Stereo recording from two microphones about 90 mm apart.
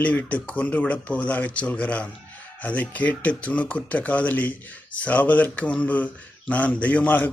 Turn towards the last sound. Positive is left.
turn(degrees=20)  # may be behind; listen again after turning